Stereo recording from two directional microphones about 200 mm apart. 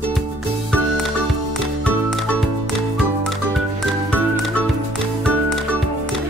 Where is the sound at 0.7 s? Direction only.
Centre (ahead or behind).